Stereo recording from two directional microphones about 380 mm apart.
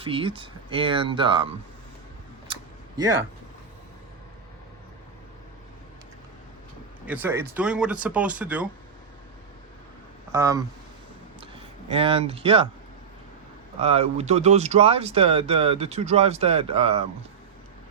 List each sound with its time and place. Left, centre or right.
0.0 s speech: centre
3.0 s speech: centre
7.0 s speech: centre
10.3 s speech: centre
13.7 s speech: centre